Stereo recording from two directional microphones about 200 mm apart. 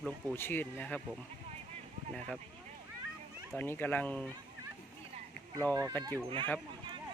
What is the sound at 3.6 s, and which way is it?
Speech, 10° left (ahead or behind).